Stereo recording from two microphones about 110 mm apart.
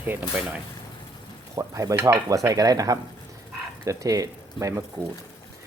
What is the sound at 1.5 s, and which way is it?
Speech, 30° right (ahead or behind).